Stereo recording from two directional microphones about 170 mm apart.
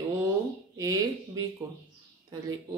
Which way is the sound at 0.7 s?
20° right (ahead or behind).